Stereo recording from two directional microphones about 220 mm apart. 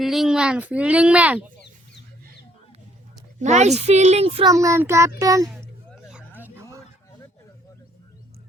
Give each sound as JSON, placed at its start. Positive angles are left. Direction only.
{"t": 0.0, "sound": "speech", "side_deg": 0}
{"t": 3.4, "sound": "speech", "side_deg": -30}
{"t": 4.5, "sound": "a child's voice", "side_deg": -15}
{"t": 5.5, "sound": "music", "side_deg": 0}